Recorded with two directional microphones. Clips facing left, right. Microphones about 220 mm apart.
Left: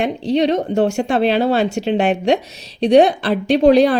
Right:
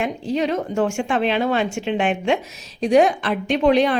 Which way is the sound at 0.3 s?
35° left (ahead or behind).